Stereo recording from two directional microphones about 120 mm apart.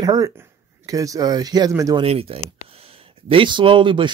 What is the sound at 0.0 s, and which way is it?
Speech, 30° right (ahead or behind).